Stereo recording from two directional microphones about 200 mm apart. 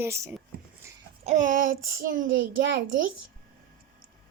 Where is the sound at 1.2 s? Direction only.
35° right (ahead or behind).